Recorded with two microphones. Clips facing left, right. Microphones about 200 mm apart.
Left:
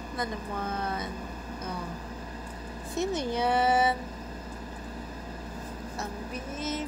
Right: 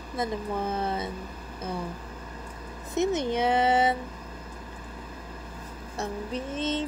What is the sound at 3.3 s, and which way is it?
Speech, 20° right (ahead or behind).